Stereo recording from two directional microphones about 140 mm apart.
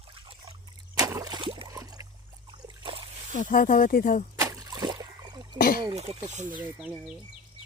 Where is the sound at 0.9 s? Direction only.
20° right (ahead or behind).